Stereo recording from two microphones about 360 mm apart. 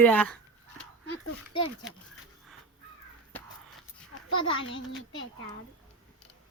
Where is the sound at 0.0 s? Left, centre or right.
Centre.